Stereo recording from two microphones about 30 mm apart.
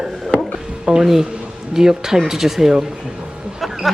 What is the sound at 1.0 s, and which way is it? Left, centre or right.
Speech, centre.